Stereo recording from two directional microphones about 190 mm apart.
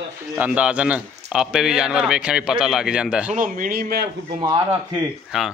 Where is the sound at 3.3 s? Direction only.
45° right (ahead or behind).